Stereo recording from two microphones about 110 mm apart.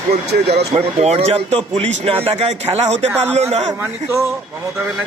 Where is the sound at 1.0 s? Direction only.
70° right (ahead or behind).